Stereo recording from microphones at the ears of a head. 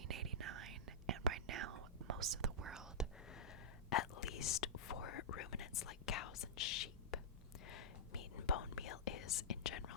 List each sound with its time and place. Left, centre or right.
0.1 s whispering: right
3.8 s whispering: left